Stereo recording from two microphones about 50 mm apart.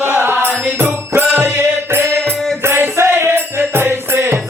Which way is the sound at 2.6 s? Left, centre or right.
Right.